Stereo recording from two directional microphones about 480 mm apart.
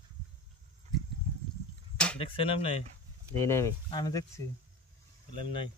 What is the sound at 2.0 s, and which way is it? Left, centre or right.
Speech, centre.